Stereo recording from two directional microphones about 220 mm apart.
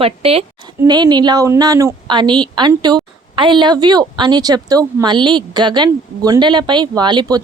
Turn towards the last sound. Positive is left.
turn(degrees=-20)  # may be behind; listen again after turning